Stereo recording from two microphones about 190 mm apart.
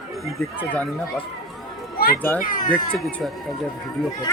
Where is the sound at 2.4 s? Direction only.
45° left (ahead or behind).